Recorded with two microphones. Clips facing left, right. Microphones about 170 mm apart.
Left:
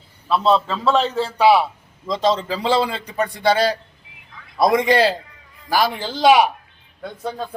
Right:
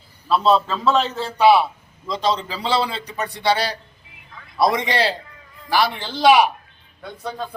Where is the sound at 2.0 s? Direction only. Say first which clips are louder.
Left 3 dB; 45° left (ahead or behind).